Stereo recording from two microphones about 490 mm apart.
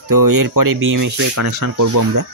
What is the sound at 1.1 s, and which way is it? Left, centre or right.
Speech, right.